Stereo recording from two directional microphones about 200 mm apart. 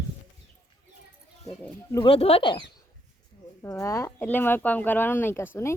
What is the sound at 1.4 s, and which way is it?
Speech, 15° left (ahead or behind).